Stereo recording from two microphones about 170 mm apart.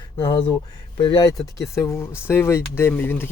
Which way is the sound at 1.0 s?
25° left (ahead or behind).